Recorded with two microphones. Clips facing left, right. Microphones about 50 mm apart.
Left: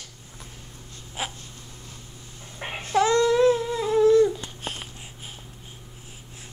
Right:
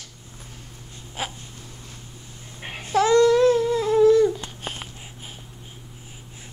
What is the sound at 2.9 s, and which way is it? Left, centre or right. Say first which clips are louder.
Babbling: right 3 dB; centre.